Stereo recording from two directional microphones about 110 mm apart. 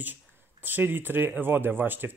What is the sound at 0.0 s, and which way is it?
Speech, 15° right (ahead or behind).